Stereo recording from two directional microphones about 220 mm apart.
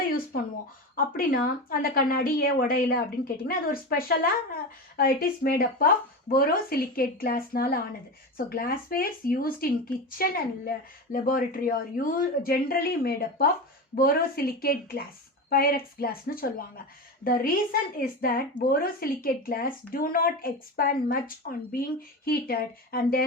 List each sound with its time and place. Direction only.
0.9 s a woman's voice: 40° left (ahead or behind)